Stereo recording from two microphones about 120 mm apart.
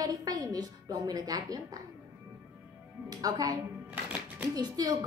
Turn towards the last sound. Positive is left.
turn(degrees=-35)  # may be behind; listen again after turning